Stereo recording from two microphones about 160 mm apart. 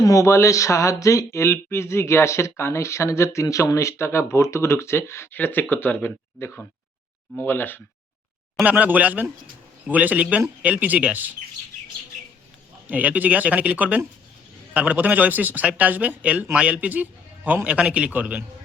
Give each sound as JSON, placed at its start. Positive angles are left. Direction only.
{"t": 0.0, "sound": "speech", "side_deg": 20}
{"t": 8.6, "sound": "speech", "side_deg": -10}
{"t": 12.9, "sound": "speech", "side_deg": -10}